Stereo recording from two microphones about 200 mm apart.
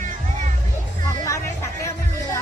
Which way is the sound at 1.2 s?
15° left (ahead or behind).